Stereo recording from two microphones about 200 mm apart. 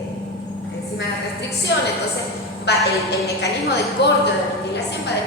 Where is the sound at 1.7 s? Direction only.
60° left (ahead or behind).